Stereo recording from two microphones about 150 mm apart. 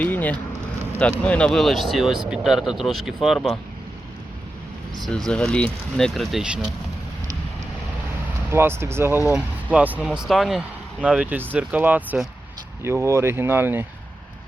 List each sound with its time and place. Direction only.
0.0 s speech: 10° left (ahead or behind)
5.0 s speech: 5° left (ahead or behind)
8.4 s speech: 15° right (ahead or behind)
12.8 s speech: 15° right (ahead or behind)